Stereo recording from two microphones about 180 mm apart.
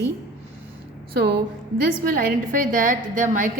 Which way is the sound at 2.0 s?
50° right (ahead or behind).